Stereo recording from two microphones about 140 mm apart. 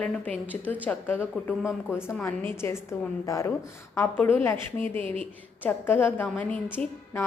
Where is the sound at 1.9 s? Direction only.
15° left (ahead or behind).